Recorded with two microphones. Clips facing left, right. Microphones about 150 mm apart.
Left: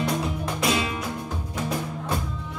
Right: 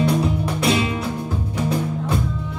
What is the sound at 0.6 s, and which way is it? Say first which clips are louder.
Music: right 4 dB; 30° right (ahead or behind).